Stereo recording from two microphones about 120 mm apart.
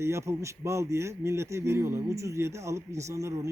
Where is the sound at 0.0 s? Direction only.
20° right (ahead or behind).